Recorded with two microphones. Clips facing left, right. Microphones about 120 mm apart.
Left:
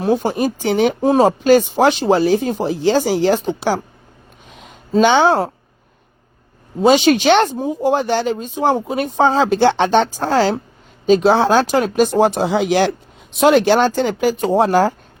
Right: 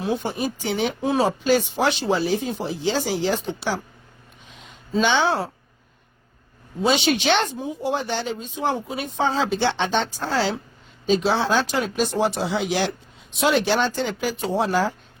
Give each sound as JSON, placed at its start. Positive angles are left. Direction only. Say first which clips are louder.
{"t": 0.0, "sound": "speech", "louder": "left 8 dB", "side_deg": 45}
{"t": 4.5, "sound": "a sound", "louder": "left 8 dB", "side_deg": 50}
{"t": 6.8, "sound": "speech", "louder": "left 8 dB", "side_deg": 45}
{"t": 12.6, "sound": "speech", "louder": "left 9 dB", "side_deg": 65}
{"t": 13.7, "sound": "speech", "louder": "left 8 dB", "side_deg": 50}